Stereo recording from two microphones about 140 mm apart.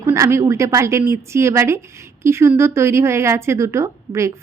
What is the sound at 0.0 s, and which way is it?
Speech, 20° right (ahead or behind).